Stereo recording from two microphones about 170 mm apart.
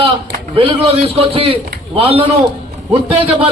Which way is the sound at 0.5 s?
35° right (ahead or behind).